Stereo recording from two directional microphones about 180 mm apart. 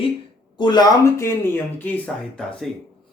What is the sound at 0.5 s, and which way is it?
Speech, 25° left (ahead or behind).